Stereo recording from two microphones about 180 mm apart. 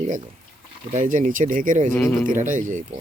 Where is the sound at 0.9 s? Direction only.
45° right (ahead or behind).